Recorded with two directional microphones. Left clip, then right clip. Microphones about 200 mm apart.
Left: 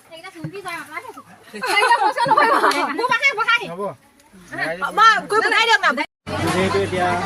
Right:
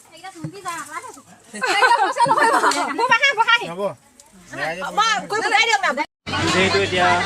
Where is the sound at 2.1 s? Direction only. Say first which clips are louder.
Even; 45° left (ahead or behind).